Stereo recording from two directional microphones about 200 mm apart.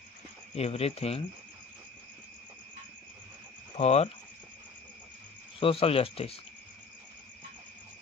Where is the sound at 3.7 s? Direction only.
30° left (ahead or behind).